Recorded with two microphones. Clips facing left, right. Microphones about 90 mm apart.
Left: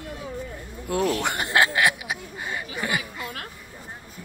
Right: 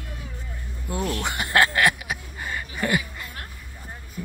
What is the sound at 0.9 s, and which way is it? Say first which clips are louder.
Speech: left 4 dB; 70° left (ahead or behind).